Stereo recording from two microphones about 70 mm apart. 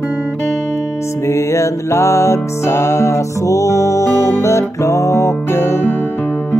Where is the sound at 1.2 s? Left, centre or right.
Left.